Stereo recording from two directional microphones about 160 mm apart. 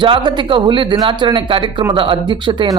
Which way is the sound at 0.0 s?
30° right (ahead or behind).